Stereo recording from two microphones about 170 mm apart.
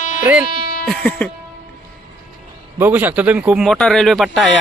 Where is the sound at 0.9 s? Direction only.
5° left (ahead or behind).